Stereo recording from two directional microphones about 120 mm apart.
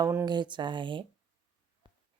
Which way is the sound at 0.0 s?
20° right (ahead or behind).